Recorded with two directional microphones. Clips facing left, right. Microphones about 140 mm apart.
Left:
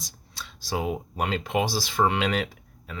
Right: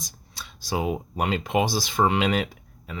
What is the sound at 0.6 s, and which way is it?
Speech, 15° right (ahead or behind).